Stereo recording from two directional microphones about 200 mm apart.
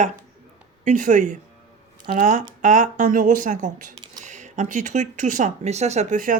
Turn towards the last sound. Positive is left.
turn(degrees=-40)  # may be behind; listen again after turning